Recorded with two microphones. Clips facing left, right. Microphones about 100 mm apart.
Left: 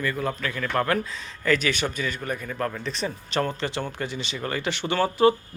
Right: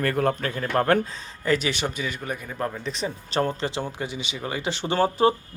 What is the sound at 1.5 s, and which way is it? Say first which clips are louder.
A man's voice: even; 20° right (ahead or behind).